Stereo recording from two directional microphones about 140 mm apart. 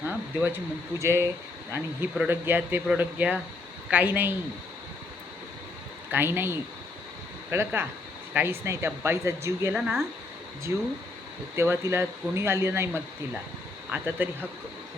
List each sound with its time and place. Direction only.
0.1 s speech: 15° right (ahead or behind)
6.1 s speech: 15° right (ahead or behind)
9.7 s speech: 5° right (ahead or behind)
10.7 s speech: 15° right (ahead or behind)